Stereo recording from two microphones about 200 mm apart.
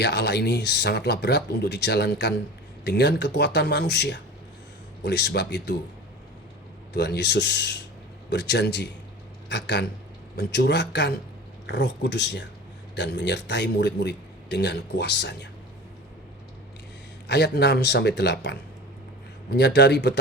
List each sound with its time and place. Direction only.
0.0 s a man's voice: 55° left (ahead or behind)
6.9 s a man's voice: 55° left (ahead or behind)
17.2 s a man's voice: 55° left (ahead or behind)